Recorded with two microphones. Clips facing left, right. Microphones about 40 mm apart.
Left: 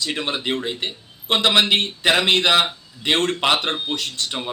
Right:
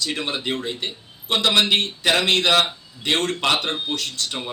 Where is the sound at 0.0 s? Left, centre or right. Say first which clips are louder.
Left 1 dB; centre.